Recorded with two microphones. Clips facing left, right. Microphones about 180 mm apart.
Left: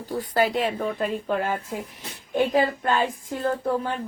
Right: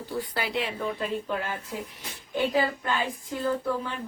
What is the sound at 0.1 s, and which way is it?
Speech, 45° left (ahead or behind).